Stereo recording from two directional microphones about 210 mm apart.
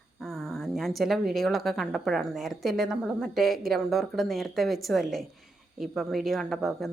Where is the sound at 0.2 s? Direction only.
Centre (ahead or behind).